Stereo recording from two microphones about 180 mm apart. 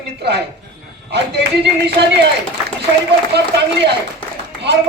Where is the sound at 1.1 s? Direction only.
65° right (ahead or behind).